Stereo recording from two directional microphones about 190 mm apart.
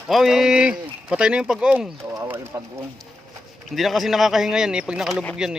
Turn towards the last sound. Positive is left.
turn(degrees=-5)  # may be behind; listen again after turning